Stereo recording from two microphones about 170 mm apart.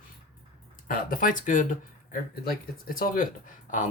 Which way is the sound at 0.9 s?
50° left (ahead or behind).